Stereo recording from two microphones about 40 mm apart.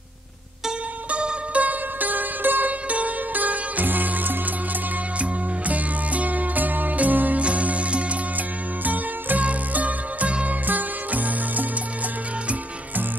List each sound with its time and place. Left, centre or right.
0.7 s music: right
1.5 s music: right
2.9 s music: right
5.2 s music: right
7.4 s music: right